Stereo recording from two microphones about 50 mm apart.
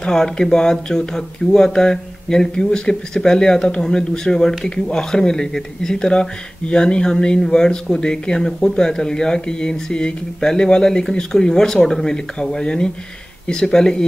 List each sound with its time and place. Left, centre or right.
0.0 s speech: centre